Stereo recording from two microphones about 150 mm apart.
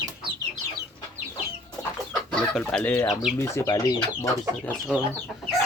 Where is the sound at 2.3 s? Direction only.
5° left (ahead or behind); by 3.9 s 20° left (ahead or behind).